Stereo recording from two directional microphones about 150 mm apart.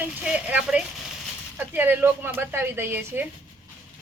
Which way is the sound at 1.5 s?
10° right (ahead or behind).